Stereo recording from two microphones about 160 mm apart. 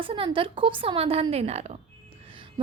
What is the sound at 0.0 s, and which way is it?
A woman's voice, 35° right (ahead or behind).